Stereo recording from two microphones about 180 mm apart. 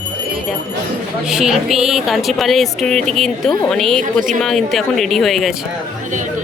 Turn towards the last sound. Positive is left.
turn(degrees=0)  # may be behind; listen again after turning